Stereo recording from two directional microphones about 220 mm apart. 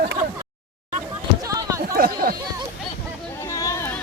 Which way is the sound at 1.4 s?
15° right (ahead or behind).